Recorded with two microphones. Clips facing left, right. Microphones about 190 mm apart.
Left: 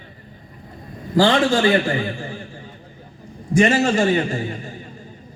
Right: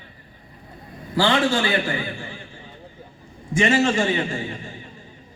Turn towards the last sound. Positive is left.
turn(degrees=40)  # may be behind; listen again after turning